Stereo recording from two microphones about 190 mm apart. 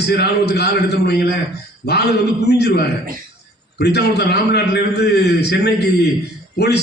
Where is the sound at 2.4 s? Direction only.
60° left (ahead or behind).